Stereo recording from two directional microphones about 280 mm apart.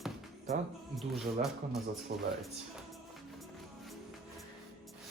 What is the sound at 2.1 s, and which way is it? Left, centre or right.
Speech, right.